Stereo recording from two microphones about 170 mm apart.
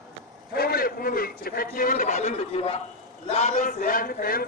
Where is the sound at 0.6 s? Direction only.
60° left (ahead or behind).